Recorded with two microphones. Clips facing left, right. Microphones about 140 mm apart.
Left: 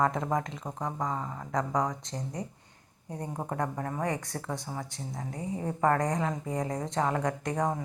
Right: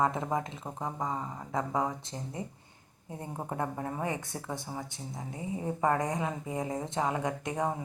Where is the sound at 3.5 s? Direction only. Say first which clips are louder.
Left 1 dB; 20° right (ahead or behind).